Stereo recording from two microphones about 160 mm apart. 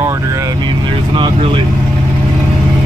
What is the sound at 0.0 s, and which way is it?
Vehicle, 20° right (ahead or behind).